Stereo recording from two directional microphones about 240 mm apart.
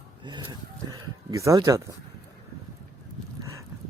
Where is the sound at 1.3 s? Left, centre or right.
Centre.